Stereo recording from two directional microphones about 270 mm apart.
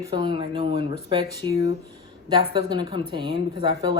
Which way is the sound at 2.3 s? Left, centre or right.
Centre.